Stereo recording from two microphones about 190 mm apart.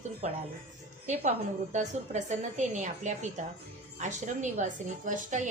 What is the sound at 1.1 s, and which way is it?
A woman's voice, 40° right (ahead or behind).